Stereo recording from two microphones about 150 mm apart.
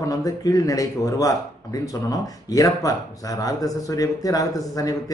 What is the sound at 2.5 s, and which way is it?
Speech, 25° left (ahead or behind).